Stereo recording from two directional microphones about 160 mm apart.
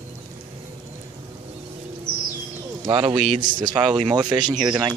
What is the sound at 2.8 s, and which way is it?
A man's voice, 35° right (ahead or behind).